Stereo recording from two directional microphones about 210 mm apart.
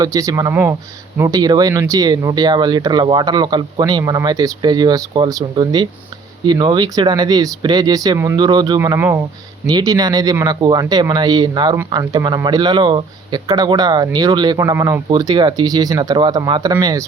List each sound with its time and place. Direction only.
0.0 s speech: 15° right (ahead or behind)